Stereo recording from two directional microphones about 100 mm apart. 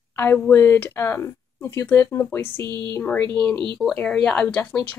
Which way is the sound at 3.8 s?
5° left (ahead or behind).